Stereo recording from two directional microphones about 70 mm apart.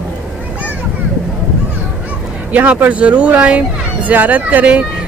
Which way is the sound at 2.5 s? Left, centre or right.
Right.